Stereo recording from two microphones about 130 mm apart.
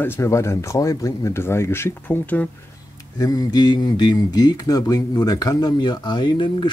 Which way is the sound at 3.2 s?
30° left (ahead or behind).